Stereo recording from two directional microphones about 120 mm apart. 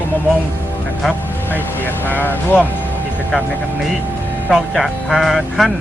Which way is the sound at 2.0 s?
15° left (ahead or behind).